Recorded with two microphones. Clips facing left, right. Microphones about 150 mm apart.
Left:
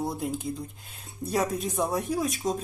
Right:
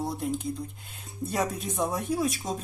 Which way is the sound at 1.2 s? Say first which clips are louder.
Left 2 dB; centre (ahead or behind).